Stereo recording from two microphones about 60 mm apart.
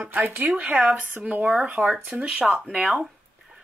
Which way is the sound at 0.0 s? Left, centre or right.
Right.